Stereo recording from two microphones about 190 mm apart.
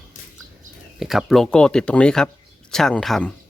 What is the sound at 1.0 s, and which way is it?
Speech, centre (ahead or behind).